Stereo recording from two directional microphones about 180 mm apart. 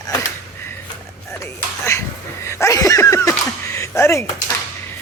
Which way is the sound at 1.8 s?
15° left (ahead or behind).